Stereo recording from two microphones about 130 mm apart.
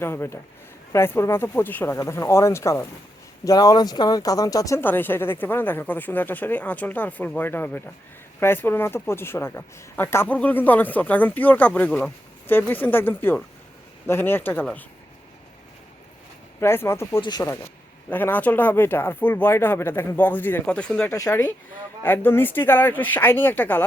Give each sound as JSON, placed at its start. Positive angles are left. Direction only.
{"t": 0.0, "sound": "speech", "side_deg": 20}
{"t": 16.6, "sound": "speech", "side_deg": 20}
{"t": 17.2, "sound": "speech", "side_deg": 35}
{"t": 18.1, "sound": "speech", "side_deg": 15}
{"t": 21.1, "sound": "speech", "side_deg": 25}
{"t": 22.0, "sound": "speech", "side_deg": 15}